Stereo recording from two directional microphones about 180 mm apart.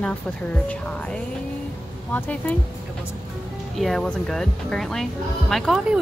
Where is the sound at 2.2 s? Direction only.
10° left (ahead or behind).